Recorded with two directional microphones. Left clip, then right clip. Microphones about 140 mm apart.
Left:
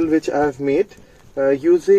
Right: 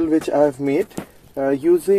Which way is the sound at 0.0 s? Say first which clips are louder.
Even; 15° right (ahead or behind).